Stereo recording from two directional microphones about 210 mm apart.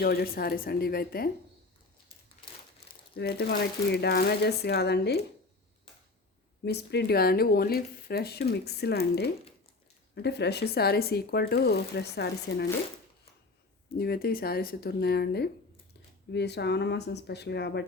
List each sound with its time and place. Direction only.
0.0 s speech: 45° left (ahead or behind)
3.2 s speech: 50° left (ahead or behind)
6.7 s speech: 50° left (ahead or behind)
14.0 s speech: 50° left (ahead or behind)